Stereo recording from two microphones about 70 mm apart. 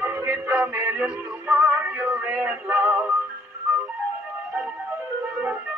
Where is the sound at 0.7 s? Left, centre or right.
Right.